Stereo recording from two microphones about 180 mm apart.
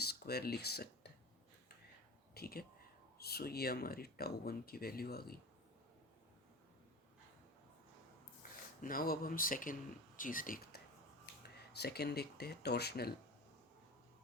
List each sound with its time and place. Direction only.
0.0 s speech: 60° left (ahead or behind)
2.3 s speech: 55° left (ahead or behind)
8.8 s speech: 50° left (ahead or behind)
11.4 s speech: 65° left (ahead or behind)